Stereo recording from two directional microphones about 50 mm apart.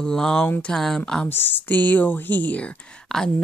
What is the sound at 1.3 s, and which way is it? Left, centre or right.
A woman's voice, left.